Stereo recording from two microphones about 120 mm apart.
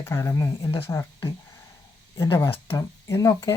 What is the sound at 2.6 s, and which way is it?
Speech, 20° left (ahead or behind).